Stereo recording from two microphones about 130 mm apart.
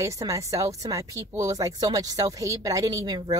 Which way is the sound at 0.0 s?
25° right (ahead or behind).